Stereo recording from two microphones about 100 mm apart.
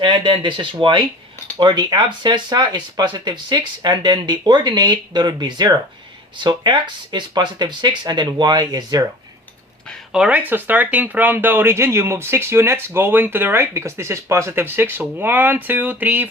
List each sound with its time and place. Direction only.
0.0 s speech: 55° right (ahead or behind)
10.1 s speech: 10° right (ahead or behind)